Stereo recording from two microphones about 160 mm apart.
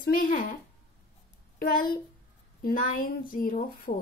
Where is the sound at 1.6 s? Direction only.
60° left (ahead or behind).